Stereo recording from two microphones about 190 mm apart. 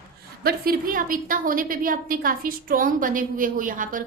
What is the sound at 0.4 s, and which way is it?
A woman's voice, 50° right (ahead or behind).